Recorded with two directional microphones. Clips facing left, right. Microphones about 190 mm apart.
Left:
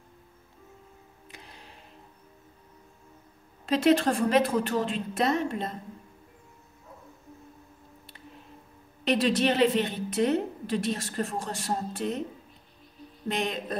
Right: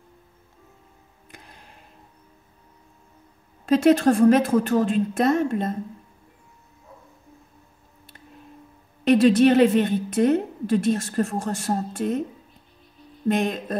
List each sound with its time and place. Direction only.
1.3 s music: 50° right (ahead or behind)
3.6 s a woman's voice: 45° right (ahead or behind)
9.0 s a woman's voice: 50° right (ahead or behind)
13.3 s a woman's voice: 50° right (ahead or behind)